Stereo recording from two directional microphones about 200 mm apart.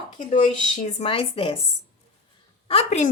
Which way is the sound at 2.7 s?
35° left (ahead or behind).